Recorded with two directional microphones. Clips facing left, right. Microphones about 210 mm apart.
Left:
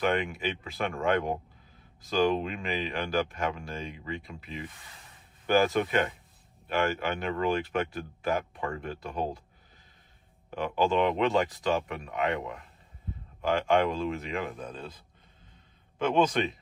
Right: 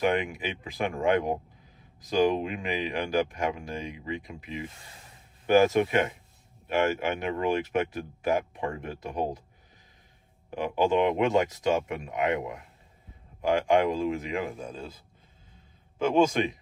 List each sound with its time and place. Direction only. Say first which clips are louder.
0.0 s speech: right 1 dB; 15° right (ahead or behind)
10.5 s speech: right 2 dB; 15° right (ahead or behind)
14.0 s speech: right 3 dB; centre (ahead or behind)
16.0 s speech: right 2 dB; 10° right (ahead or behind)